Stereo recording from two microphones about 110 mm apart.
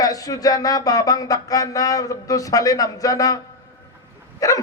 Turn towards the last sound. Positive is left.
turn(degrees=35)  # may be behind; listen again after turning